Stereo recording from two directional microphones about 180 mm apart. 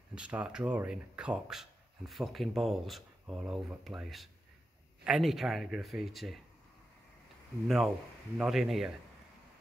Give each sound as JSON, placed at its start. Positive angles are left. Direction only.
{"t": 0.1, "sound": "speech", "side_deg": -5}
{"t": 7.6, "sound": "speech", "side_deg": 0}